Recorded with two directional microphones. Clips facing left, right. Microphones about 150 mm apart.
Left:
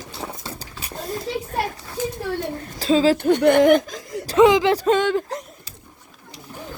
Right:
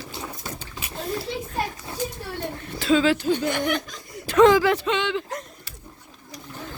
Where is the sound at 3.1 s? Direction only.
60° left (ahead or behind).